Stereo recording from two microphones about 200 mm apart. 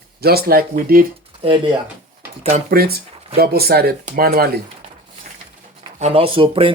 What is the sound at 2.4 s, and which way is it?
Speech, 40° right (ahead or behind).